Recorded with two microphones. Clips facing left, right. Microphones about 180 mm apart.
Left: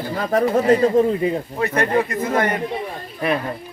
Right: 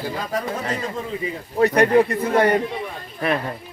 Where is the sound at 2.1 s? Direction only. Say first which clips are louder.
Right 2 dB; 35° right (ahead or behind).